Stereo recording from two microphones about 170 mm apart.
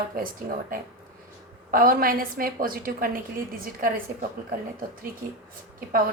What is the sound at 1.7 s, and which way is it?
Speech, 55° right (ahead or behind).